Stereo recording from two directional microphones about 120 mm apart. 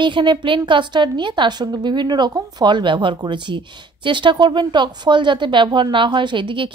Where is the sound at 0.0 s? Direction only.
40° right (ahead or behind).